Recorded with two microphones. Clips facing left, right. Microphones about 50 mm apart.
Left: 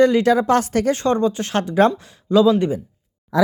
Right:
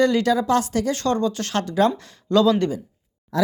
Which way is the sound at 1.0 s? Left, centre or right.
Left.